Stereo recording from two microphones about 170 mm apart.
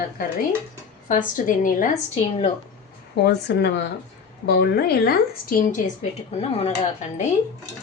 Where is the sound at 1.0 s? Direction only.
50° left (ahead or behind).